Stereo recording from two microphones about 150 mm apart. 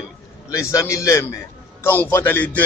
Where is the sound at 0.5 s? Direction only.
20° left (ahead or behind).